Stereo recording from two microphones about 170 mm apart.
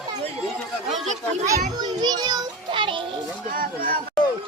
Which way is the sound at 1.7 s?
25° right (ahead or behind).